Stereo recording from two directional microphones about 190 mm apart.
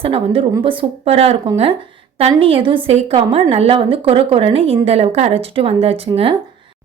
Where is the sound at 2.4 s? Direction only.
30° right (ahead or behind).